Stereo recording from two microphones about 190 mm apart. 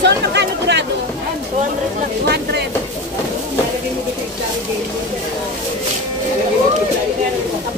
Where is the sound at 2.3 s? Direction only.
60° right (ahead or behind).